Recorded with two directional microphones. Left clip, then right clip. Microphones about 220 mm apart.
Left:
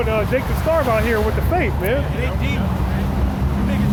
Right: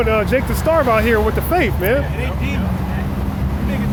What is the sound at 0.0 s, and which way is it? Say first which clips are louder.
Speech: right 3 dB; 45° right (ahead or behind).